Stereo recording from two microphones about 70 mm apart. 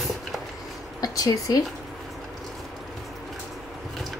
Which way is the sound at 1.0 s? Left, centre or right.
Left.